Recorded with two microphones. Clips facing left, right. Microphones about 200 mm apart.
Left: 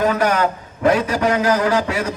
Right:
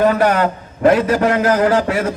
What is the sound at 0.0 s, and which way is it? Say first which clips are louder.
A man's voice: right 3 dB; 45° right (ahead or behind).